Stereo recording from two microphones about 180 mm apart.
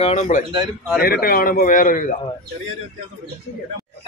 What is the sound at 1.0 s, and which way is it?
A man's voice, 55° left (ahead or behind).